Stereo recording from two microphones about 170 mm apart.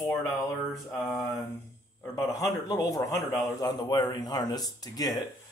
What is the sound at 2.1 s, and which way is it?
Speech, 20° left (ahead or behind).